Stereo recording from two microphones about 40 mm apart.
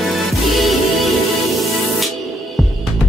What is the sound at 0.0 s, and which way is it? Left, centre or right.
Music, centre.